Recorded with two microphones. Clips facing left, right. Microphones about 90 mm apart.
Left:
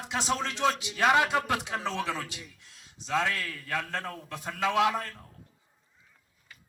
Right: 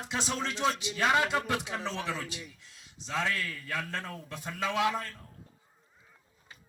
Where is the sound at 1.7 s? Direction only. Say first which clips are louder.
Left 3 dB; 45° left (ahead or behind).